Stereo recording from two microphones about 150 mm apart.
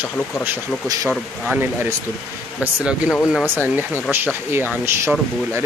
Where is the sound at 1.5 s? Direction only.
10° right (ahead or behind).